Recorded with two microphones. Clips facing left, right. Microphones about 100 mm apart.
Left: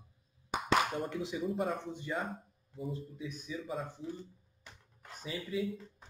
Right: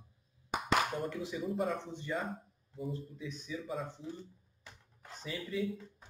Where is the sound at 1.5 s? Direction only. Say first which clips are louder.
Even; centre (ahead or behind).